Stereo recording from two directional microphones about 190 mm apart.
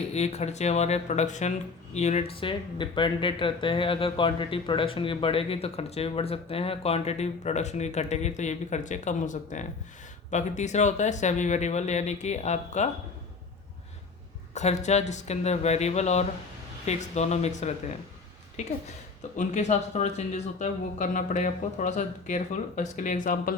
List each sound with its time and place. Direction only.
0.1 s speech: 35° left (ahead or behind)
14.5 s speech: 35° left (ahead or behind)